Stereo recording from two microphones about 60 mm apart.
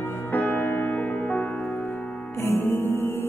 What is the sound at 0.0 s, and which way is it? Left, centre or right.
Music, left.